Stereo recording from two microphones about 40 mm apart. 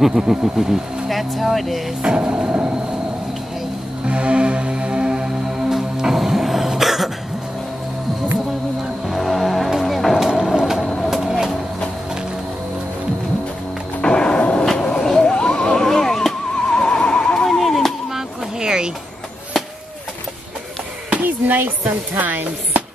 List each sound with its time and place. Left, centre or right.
0.0 s speech: centre
2.0 s music: right
2.5 s train: right
4.0 s music: right; by 7.1 s centre
9.0 s music: centre
10.1 s vehicle: centre
11.0 s train: centre
14.0 s music: left
17.0 s neigh: left
17.6 s a sound: centre
18.6 s vehicle: centre
21.1 s a sound: right
22.2 s chopping: right